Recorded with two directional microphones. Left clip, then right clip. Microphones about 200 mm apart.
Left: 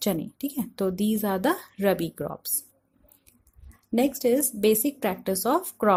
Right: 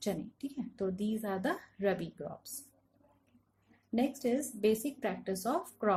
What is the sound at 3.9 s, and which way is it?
A woman's voice, 50° left (ahead or behind).